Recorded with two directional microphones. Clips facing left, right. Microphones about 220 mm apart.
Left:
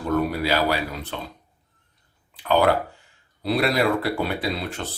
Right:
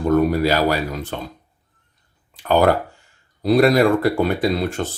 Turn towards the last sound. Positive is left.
turn(degrees=-45)  # may be behind; listen again after turning